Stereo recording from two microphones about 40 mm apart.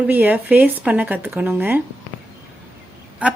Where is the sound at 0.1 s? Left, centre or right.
Right.